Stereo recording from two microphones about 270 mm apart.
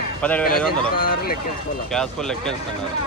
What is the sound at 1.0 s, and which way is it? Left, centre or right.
Speech, left.